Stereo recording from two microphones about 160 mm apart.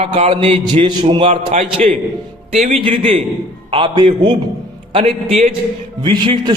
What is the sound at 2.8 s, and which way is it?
A man's voice, 35° right (ahead or behind).